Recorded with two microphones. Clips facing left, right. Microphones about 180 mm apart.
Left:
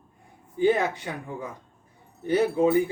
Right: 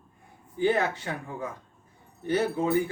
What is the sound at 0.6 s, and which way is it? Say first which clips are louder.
Speech: left 3 dB; 15° left (ahead or behind).